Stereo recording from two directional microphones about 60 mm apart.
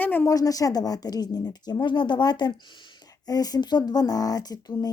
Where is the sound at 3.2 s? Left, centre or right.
Left.